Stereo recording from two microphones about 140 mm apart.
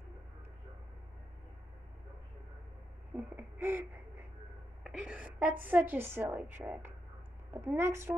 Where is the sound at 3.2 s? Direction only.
15° right (ahead or behind).